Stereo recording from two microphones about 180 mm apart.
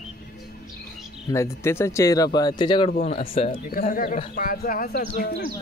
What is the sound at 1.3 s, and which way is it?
Speech, 15° left (ahead or behind).